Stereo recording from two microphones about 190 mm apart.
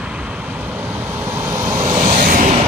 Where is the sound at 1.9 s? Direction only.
45° right (ahead or behind).